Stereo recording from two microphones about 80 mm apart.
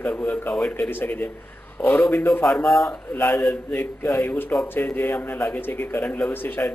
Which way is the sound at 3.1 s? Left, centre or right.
Left.